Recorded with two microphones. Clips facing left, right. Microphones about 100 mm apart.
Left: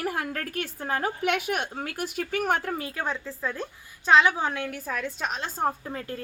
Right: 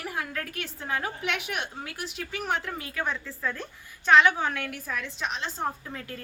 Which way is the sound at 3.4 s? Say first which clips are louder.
Left 1 dB; 15° left (ahead or behind).